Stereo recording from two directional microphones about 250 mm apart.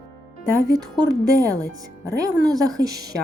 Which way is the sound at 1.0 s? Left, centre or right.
Centre.